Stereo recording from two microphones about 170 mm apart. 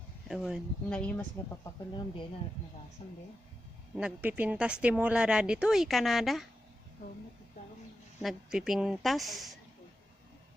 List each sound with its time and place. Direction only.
0.3 s a woman's voice: centre (ahead or behind)
3.0 s speech: 35° left (ahead or behind)
3.9 s a woman's voice: 10° right (ahead or behind)
8.2 s a woman's voice: centre (ahead or behind)